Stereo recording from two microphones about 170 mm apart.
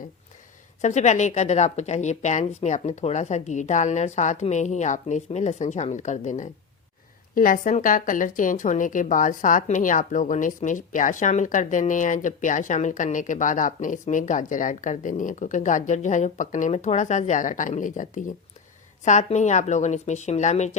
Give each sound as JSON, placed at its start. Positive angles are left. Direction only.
{"t": 0.8, "sound": "a woman's voice", "side_deg": 45}